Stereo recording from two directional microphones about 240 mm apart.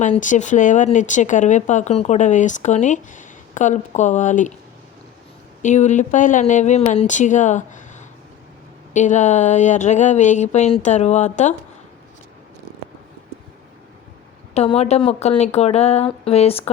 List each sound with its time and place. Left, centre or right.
0.0 s speech: left
5.6 s speech: left
14.5 s speech: left